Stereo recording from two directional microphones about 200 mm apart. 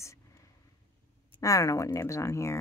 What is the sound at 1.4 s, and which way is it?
Speech, 15° left (ahead or behind).